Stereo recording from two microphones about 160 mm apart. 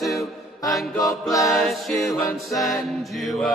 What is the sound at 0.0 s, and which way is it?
Music, centre (ahead or behind).